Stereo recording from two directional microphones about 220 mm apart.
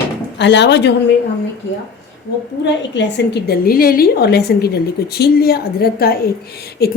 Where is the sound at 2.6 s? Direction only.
50° left (ahead or behind).